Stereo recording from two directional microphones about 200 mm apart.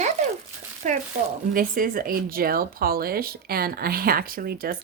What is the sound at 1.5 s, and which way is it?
Speech, 45° right (ahead or behind).